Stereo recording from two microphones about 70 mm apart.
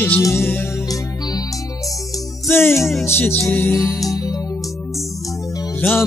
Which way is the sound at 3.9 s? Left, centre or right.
Left.